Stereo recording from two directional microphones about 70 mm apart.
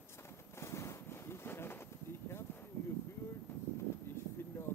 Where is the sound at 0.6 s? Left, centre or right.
Left.